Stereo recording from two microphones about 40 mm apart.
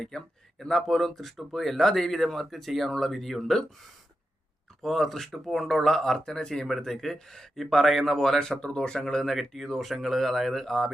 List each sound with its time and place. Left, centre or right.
0.1 s speech: centre
0.7 s speech: centre
4.8 s speech: centre
6.7 s speech: centre